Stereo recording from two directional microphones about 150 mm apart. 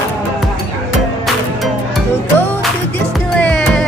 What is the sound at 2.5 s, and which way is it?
Music, 10° left (ahead or behind).